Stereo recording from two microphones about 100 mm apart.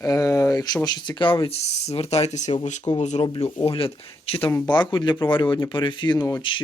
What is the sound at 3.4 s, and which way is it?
Speech, 75° left (ahead or behind).